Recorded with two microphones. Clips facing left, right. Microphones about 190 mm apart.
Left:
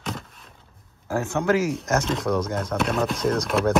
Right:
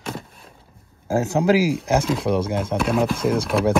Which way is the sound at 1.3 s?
35° right (ahead or behind).